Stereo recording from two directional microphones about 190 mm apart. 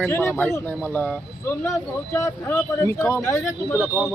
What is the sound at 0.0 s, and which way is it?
Speech, 10° left (ahead or behind).